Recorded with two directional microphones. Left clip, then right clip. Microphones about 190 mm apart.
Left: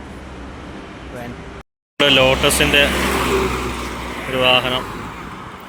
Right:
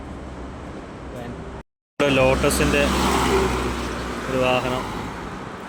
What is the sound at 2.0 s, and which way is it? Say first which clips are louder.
Speech: left 5 dB; 5° right (ahead or behind).